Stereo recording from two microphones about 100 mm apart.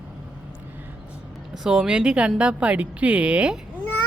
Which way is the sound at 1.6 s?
5° right (ahead or behind).